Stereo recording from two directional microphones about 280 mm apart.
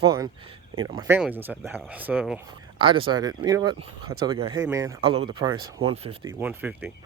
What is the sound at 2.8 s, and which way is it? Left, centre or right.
Speech, centre.